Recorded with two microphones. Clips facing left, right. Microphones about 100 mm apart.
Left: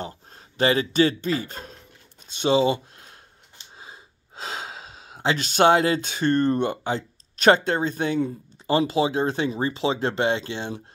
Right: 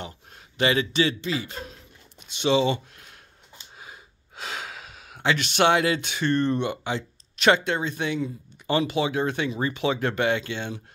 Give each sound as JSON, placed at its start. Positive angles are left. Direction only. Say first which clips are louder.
{"t": 0.6, "sound": "a man's voice", "louder": "left 3 dB", "side_deg": 35}